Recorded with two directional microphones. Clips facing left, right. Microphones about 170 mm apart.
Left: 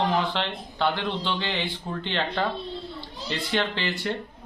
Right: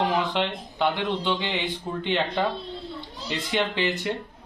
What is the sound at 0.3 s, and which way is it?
A man's voice, 10° right (ahead or behind).